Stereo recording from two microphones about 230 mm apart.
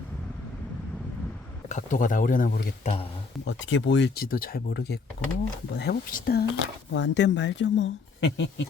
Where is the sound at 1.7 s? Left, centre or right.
Left.